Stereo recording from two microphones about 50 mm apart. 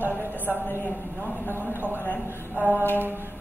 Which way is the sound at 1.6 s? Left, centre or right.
Right.